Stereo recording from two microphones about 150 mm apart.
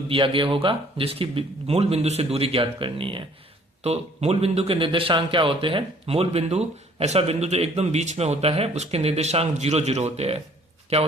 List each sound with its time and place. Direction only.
0.1 s a man's voice: 35° right (ahead or behind)